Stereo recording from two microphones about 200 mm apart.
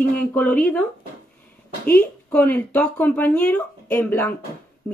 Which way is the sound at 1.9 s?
10° left (ahead or behind).